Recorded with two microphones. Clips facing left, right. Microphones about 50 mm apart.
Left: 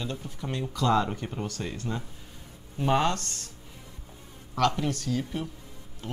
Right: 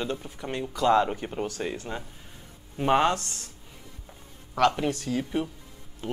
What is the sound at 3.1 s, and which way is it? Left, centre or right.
Speech, centre.